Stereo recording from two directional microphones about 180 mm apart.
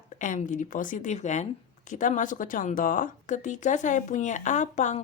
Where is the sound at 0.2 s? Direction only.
45° left (ahead or behind).